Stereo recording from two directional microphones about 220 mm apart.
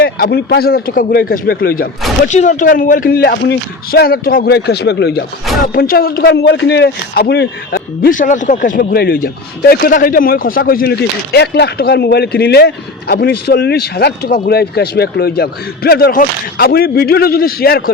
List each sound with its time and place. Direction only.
0.0 s speech: 45° left (ahead or behind)